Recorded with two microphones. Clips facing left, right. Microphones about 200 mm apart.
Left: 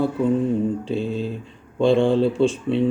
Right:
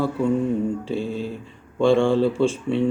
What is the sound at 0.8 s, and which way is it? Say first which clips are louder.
Mantra: left 2 dB; 20° left (ahead or behind).